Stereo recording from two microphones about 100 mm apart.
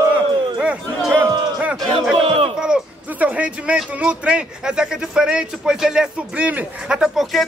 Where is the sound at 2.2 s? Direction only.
70° right (ahead or behind).